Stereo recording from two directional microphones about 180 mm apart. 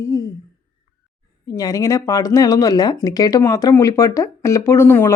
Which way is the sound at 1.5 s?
20° left (ahead or behind).